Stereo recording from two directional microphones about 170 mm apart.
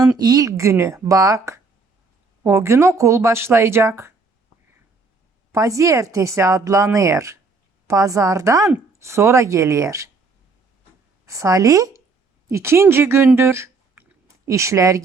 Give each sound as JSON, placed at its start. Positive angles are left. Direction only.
{"t": 0.2, "sound": "a woman's voice", "side_deg": -20}
{"t": 5.5, "sound": "a woman's voice", "side_deg": -20}
{"t": 11.3, "sound": "speech", "side_deg": -20}